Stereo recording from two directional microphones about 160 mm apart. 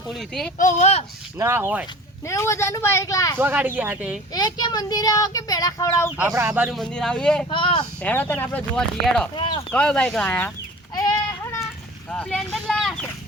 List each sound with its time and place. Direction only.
0.1 s speech: centre (ahead or behind)
0.6 s speech: 50° left (ahead or behind)
1.4 s speech: 15° right (ahead or behind)
2.2 s speech: 20° left (ahead or behind)
3.3 s speech: 10° right (ahead or behind)
4.4 s speech: 25° left (ahead or behind)
6.1 s speech: 15° right (ahead or behind)
6.7 s speech: 5° left (ahead or behind)
7.5 s speech: 30° left (ahead or behind)
8.0 s speech: 10° left (ahead or behind)
9.3 s speech: 30° left (ahead or behind)
9.7 s speech: 5° left (ahead or behind)
10.9 s a sound: 25° left (ahead or behind)
12.1 s a sound: 5° left (ahead or behind)